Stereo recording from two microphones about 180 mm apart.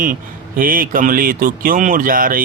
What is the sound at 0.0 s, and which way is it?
Speech, 50° right (ahead or behind).